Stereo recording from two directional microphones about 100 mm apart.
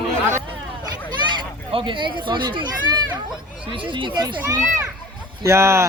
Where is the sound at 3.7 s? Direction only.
60° right (ahead or behind).